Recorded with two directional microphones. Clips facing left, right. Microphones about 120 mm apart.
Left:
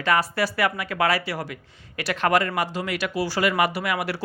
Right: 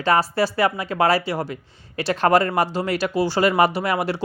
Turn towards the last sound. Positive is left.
turn(degrees=-30)  # may be behind; listen again after turning